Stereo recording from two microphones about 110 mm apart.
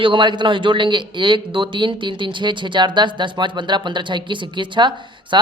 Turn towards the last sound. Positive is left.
turn(degrees=-45)  # may be behind; listen again after turning